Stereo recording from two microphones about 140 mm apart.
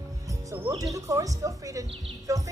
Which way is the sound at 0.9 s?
25° right (ahead or behind).